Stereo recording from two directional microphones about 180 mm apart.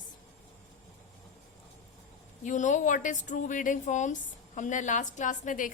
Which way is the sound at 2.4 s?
45° left (ahead or behind).